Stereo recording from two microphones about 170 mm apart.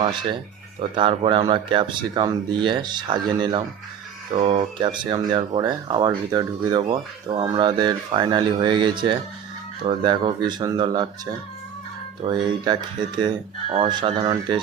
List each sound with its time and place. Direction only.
0.0 s speech: 30° right (ahead or behind)
12.2 s speech: 35° right (ahead or behind)